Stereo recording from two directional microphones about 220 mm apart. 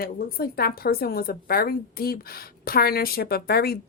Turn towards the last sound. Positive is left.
turn(degrees=45)  # may be behind; listen again after turning